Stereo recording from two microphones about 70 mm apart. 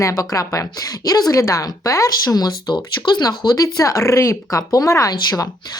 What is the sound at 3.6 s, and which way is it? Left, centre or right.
Speech, left.